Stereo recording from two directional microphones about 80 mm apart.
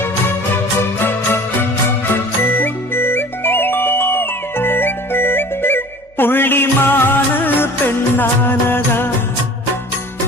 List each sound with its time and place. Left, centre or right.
2.1 s music: left